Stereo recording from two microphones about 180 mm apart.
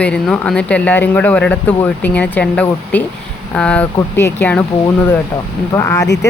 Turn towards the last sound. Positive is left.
turn(degrees=15)  # may be behind; listen again after turning